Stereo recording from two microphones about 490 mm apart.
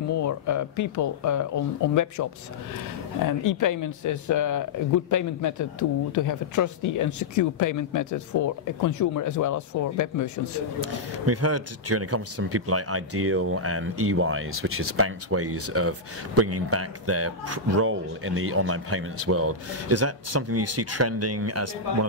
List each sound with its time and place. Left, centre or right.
0.1 s speech: left
10.9 s speech: right